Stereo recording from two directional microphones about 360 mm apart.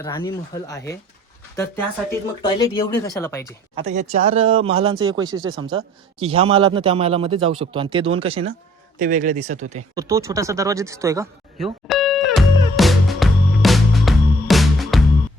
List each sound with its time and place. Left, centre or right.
0.0 s speech: centre
3.8 s speech: centre
9.9 s a sound: centre